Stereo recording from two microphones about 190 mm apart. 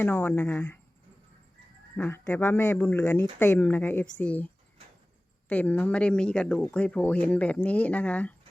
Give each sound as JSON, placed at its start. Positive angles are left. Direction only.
{"t": 0.0, "sound": "speech", "side_deg": 10}
{"t": 2.0, "sound": "speech", "side_deg": 10}
{"t": 5.5, "sound": "speech", "side_deg": 10}